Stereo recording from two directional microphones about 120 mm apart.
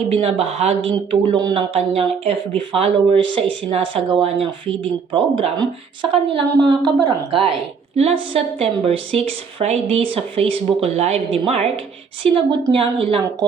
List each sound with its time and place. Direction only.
0.1 s a woman's voice: 60° right (ahead or behind); by 7.3 s 30° right (ahead or behind)
7.3 s a woman's voice: 50° right (ahead or behind)
12.2 s speech: 45° right (ahead or behind)